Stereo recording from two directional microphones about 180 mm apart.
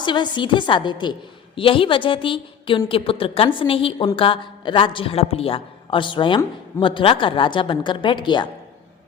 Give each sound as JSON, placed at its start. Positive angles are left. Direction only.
{"t": 0.0, "sound": "a woman's voice", "side_deg": 25}